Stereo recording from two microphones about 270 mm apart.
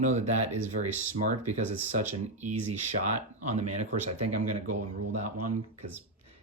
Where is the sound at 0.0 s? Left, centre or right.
Right.